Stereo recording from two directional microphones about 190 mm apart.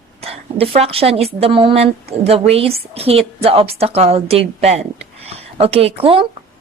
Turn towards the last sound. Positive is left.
turn(degrees=-30)  # may be behind; listen again after turning